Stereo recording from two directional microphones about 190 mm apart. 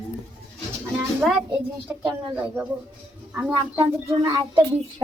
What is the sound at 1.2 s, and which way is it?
A child's voice, 5° right (ahead or behind).